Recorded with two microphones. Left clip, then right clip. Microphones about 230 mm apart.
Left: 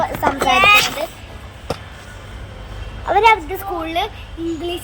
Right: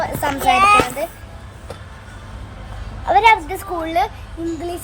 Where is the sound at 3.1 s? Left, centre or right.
Centre.